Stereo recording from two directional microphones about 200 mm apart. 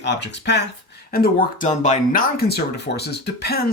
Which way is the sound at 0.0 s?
60° left (ahead or behind).